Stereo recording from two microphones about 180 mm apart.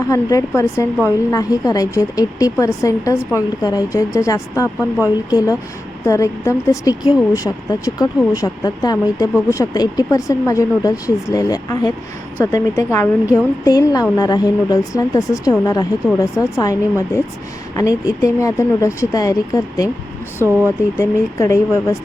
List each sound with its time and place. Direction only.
0.1 s a woman's voice: 20° left (ahead or behind)
20.9 s speech: 15° left (ahead or behind)